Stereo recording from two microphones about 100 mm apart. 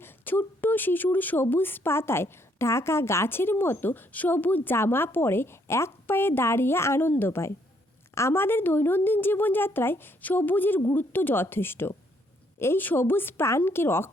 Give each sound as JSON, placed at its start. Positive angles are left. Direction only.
{"t": 0.0, "sound": "speech", "side_deg": 20}